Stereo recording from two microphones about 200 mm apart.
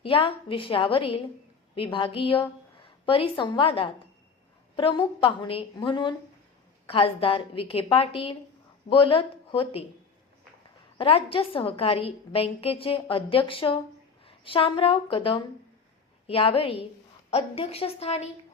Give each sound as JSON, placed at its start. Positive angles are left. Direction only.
{"t": 0.0, "sound": "a woman's voice", "side_deg": 25}
{"t": 10.9, "sound": "a woman's voice", "side_deg": 25}